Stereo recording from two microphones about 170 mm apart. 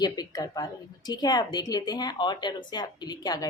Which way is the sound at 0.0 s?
20° left (ahead or behind).